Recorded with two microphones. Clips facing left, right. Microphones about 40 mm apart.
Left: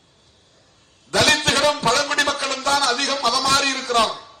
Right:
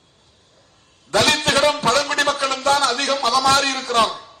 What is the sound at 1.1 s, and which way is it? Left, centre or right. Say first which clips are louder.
A man's voice: even; right.